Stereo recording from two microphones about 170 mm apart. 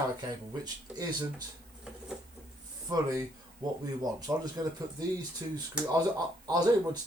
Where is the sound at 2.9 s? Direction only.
20° right (ahead or behind).